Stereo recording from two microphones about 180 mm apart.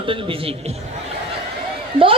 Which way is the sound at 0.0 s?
30° right (ahead or behind).